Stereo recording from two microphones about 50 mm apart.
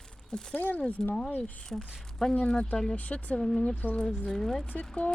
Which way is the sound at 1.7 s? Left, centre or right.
Centre.